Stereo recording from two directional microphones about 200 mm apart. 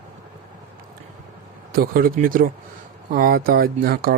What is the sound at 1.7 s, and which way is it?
Speech, 45° right (ahead or behind).